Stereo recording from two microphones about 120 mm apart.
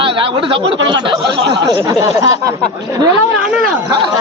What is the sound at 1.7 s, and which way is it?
Speech, 20° right (ahead or behind).